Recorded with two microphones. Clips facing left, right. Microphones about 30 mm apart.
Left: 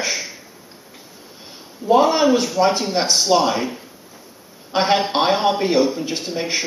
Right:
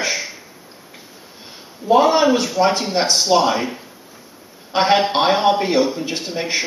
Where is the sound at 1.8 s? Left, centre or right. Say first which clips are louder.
Right 1 dB; centre.